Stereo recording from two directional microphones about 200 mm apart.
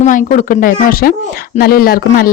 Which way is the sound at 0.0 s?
40° left (ahead or behind).